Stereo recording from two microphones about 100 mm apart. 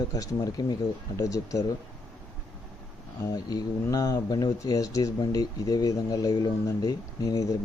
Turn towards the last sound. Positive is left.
turn(degrees=40)  # may be behind; listen again after turning